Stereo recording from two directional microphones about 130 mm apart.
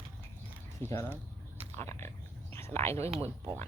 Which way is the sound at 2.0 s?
20° left (ahead or behind).